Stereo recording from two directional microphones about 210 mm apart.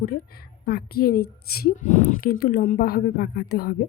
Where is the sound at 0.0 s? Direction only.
45° left (ahead or behind).